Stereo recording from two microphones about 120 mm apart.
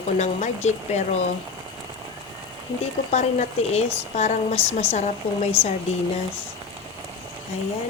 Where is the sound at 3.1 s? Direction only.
65° left (ahead or behind).